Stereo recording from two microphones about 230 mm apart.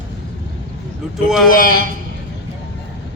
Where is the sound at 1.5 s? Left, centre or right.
Left.